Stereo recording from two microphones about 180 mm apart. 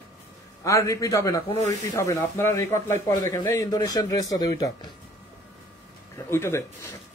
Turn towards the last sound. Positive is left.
turn(degrees=15)  # may be behind; listen again after turning